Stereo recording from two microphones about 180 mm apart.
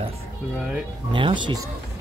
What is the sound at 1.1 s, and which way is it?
Speech, 25° right (ahead or behind).